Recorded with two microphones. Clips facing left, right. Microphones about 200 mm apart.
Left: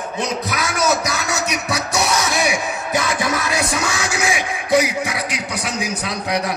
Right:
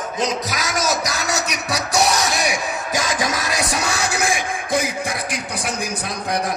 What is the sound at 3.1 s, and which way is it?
Music, 80° right.